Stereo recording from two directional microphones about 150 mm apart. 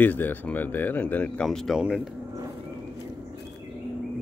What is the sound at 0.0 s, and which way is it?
Speech, 10° left (ahead or behind).